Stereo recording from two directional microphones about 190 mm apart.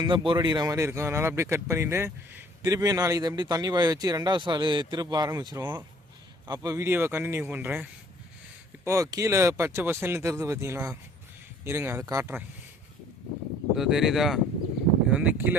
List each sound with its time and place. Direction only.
0.0 s speech: 25° right (ahead or behind)
13.7 s speech: centre (ahead or behind)